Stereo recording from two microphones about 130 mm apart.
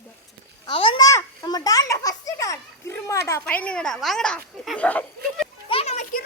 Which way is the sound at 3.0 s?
20° left (ahead or behind).